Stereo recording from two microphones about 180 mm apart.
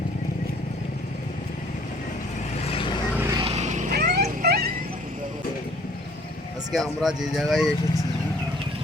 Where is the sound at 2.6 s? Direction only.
30° left (ahead or behind).